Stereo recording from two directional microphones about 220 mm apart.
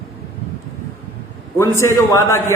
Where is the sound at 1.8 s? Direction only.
15° left (ahead or behind).